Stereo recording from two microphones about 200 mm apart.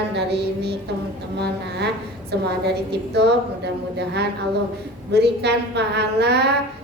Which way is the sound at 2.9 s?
55° right (ahead or behind).